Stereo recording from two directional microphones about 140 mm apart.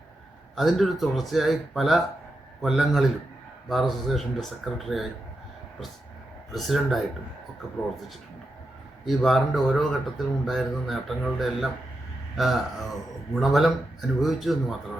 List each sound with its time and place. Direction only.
0.5 s speech: centre (ahead or behind)
6.5 s speech: centre (ahead or behind)
9.0 s speech: centre (ahead or behind)